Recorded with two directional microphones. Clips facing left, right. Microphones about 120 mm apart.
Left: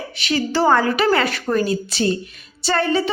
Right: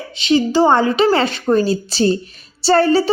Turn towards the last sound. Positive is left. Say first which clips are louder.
# right 6 dB
turn(degrees=-35)  # may be behind; listen again after turning